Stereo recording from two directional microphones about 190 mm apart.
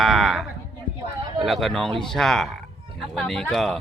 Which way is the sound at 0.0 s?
Centre (ahead or behind).